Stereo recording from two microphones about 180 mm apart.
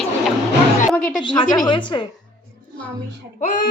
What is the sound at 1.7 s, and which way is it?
Speech, 25° left (ahead or behind).